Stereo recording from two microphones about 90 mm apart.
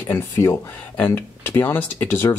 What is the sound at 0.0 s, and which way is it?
Speech, 30° left (ahead or behind).